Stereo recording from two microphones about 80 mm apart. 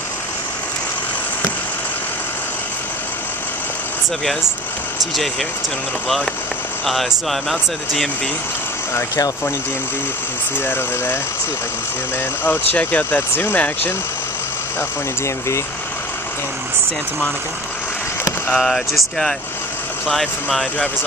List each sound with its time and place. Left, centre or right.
6.9 s speech: centre
10.6 s speech: left
12.4 s speech: left
14.8 s speech: left
18.5 s speech: centre